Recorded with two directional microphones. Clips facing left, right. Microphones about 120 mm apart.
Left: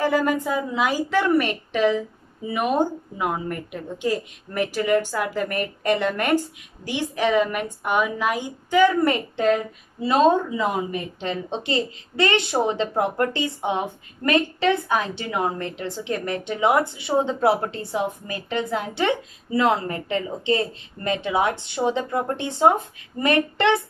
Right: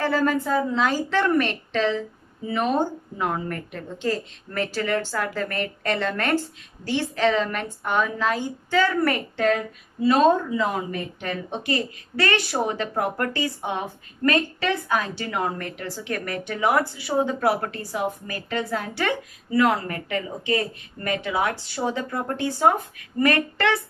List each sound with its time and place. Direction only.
0.0 s a woman's voice: 15° left (ahead or behind)